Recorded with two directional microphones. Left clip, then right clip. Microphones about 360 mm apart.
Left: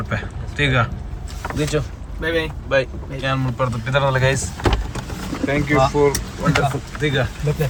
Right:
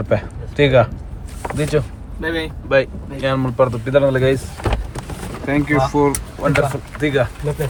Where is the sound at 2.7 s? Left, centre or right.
Centre.